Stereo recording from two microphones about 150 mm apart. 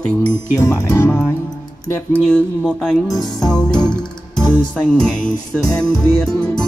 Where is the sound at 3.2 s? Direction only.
5° left (ahead or behind).